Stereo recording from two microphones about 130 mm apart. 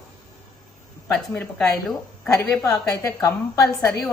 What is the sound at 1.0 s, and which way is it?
Speech, 20° left (ahead or behind).